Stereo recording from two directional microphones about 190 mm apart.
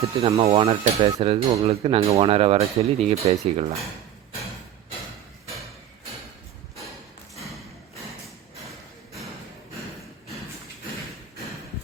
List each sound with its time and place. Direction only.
0.2 s cutlery: 30° right (ahead or behind)